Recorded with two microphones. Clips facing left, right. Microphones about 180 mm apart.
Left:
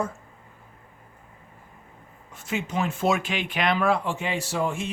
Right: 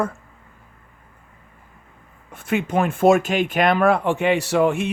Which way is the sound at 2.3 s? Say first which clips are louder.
Right 7 dB; 60° right (ahead or behind).